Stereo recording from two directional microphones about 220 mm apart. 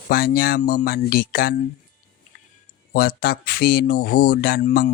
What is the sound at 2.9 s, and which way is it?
Speech, 40° left (ahead or behind).